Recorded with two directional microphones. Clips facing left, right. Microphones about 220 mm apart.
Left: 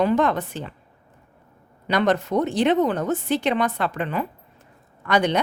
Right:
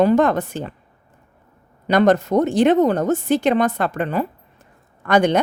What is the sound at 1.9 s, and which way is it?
Speech, 45° right (ahead or behind).